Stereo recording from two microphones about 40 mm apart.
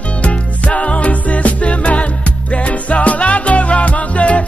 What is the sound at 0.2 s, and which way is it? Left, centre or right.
Music, left.